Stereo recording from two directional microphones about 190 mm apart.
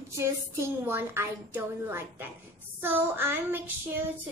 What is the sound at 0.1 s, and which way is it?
Child singing, 15° right (ahead or behind).